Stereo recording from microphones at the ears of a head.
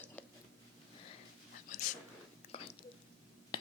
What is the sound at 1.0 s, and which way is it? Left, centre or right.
Whispering, left.